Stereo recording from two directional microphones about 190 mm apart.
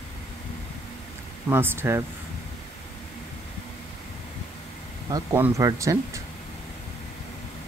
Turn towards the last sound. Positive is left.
turn(degrees=-15)  # may be behind; listen again after turning